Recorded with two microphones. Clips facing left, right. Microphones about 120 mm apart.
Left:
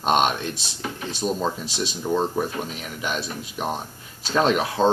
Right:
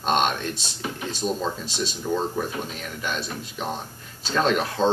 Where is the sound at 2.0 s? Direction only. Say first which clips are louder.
Left 3 dB; 15° left (ahead or behind).